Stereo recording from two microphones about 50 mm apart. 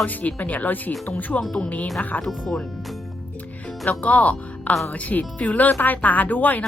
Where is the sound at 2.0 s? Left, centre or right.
Left.